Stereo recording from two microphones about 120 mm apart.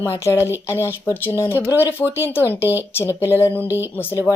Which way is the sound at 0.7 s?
20° right (ahead or behind).